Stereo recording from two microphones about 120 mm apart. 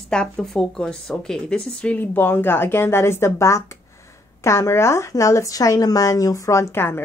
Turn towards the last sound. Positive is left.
turn(degrees=20)  # may be behind; listen again after turning